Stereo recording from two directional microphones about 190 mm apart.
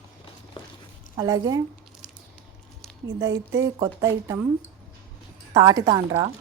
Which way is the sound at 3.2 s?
15° right (ahead or behind).